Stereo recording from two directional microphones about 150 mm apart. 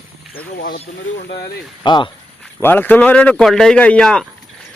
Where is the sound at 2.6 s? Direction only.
15° left (ahead or behind).